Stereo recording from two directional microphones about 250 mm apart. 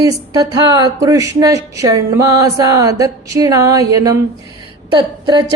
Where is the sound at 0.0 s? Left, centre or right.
Centre.